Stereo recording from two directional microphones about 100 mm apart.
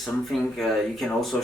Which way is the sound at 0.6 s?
5° left (ahead or behind).